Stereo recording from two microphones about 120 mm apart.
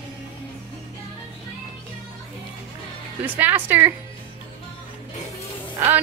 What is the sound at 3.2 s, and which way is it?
Speech, 15° right (ahead or behind).